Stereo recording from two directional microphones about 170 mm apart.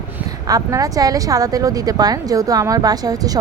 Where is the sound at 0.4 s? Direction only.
20° right (ahead or behind).